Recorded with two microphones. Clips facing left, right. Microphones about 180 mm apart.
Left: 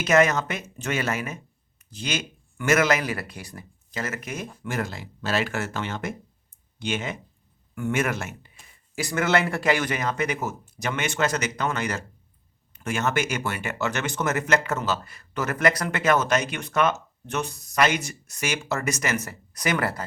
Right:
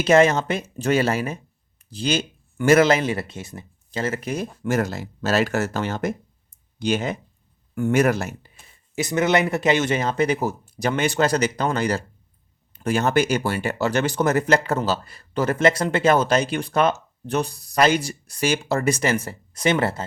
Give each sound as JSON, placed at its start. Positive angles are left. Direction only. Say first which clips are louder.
{"t": 0.0, "sound": "speech", "louder": "right 4 dB", "side_deg": -30}
{"t": 9.0, "sound": "speech", "louder": "right 3 dB", "side_deg": -20}